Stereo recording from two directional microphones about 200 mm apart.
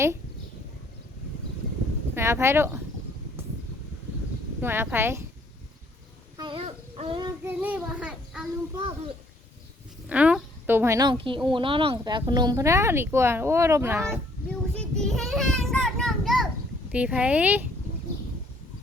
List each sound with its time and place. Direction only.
2.1 s speech: 15° right (ahead or behind)
4.6 s speech: 10° right (ahead or behind)
6.3 s speech: 25° right (ahead or behind)
7.4 s speech: 10° right (ahead or behind)
10.1 s a woman's voice: 5° right (ahead or behind)
14.8 s a child's voice: 5° left (ahead or behind)